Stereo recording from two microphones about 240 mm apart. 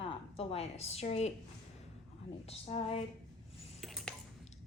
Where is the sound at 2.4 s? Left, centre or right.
Left.